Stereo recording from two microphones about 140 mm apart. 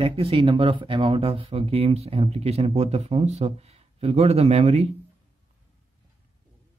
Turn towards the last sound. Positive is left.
turn(degrees=-50)  # may be behind; listen again after turning